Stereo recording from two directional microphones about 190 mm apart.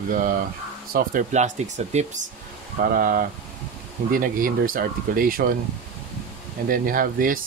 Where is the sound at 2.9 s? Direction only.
50° right (ahead or behind).